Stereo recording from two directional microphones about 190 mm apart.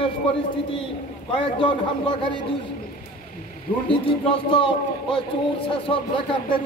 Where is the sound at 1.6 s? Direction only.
25° left (ahead or behind).